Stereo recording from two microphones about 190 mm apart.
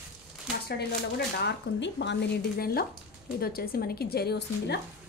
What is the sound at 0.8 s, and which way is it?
Speech, 60° left (ahead or behind).